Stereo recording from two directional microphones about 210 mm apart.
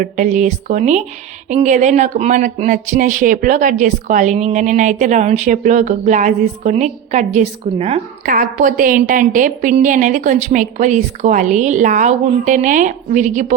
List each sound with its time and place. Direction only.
0.0 s speech: 35° right (ahead or behind)